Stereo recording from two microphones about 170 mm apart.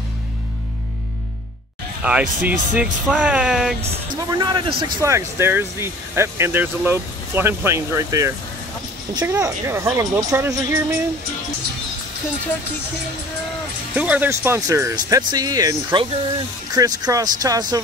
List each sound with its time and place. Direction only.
2.0 s speech: 10° right (ahead or behind)
4.3 s speech: 25° right (ahead or behind)
5.0 s speech: 15° right (ahead or behind)
13.9 s speech: 10° right (ahead or behind)